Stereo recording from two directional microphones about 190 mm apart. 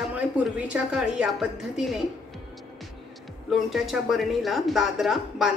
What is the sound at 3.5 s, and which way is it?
Speech, centre (ahead or behind).